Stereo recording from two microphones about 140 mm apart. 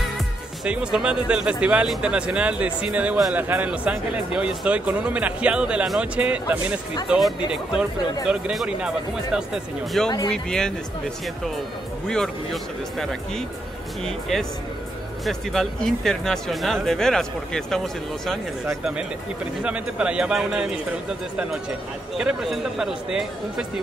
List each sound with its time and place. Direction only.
0.7 s speech: 5° right (ahead or behind)
12.1 s speech: 5° left (ahead or behind)
14.3 s speech: 5° left (ahead or behind)
19.6 s speech: 10° right (ahead or behind)
22.1 s speech: 5° right (ahead or behind)